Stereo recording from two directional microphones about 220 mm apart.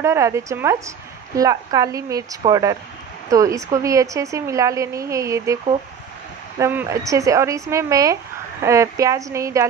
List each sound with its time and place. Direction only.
0.0 s speech: 15° right (ahead or behind)
6.6 s speech: 10° right (ahead or behind)